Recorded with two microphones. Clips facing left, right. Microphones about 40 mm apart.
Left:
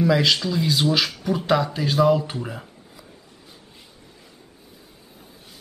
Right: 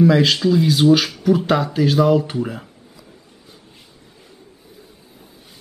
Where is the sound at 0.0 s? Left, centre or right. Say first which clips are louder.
Right 5 dB; centre.